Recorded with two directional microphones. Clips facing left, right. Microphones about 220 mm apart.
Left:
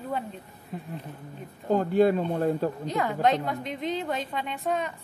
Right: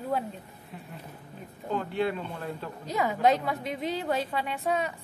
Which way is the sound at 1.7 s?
40° left (ahead or behind).